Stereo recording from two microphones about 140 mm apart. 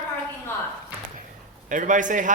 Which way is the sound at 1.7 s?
65° right (ahead or behind).